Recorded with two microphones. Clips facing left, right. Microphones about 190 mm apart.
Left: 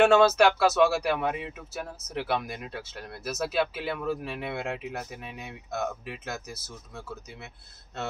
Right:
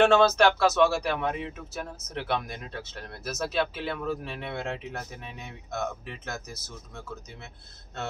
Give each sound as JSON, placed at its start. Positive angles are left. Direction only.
{"t": 0.0, "sound": "speech", "side_deg": 5}